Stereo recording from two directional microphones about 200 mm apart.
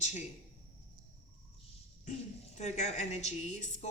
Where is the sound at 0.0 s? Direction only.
35° left (ahead or behind).